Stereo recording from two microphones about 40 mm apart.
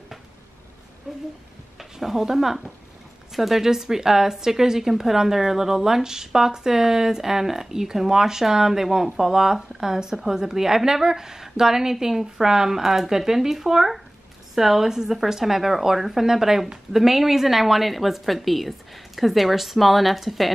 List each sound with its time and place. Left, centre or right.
1.1 s a woman's voice: right
1.8 s speech: centre